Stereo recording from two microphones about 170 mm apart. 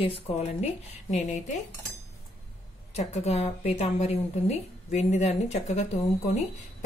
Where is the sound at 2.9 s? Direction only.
40° left (ahead or behind).